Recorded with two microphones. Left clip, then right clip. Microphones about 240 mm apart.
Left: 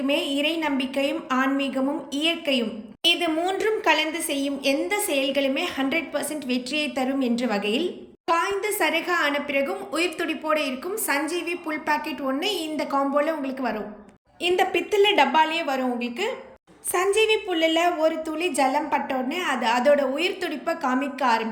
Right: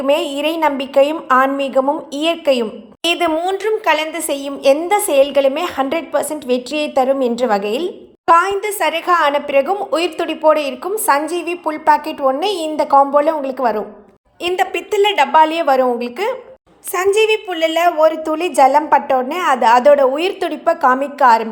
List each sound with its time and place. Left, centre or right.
0.1 s a woman's voice: centre